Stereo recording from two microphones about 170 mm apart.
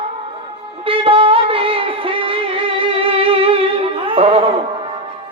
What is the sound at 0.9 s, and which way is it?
Music, 35° right (ahead or behind).